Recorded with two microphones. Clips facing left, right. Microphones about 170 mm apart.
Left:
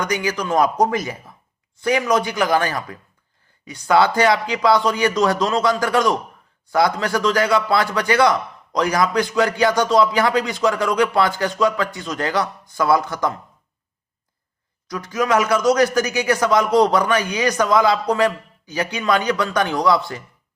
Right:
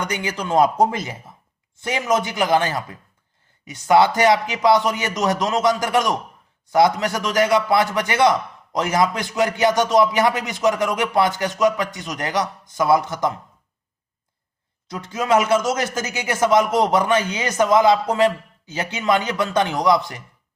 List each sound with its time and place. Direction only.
0.0 s a man's voice: 25° right (ahead or behind)
14.8 s a man's voice: 25° right (ahead or behind)